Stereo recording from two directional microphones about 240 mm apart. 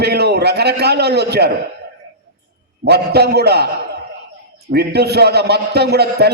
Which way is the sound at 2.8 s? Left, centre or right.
Right.